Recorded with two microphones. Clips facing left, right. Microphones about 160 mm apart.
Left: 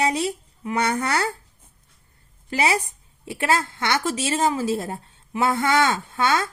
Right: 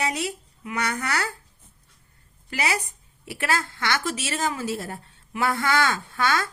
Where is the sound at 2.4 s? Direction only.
25° left (ahead or behind).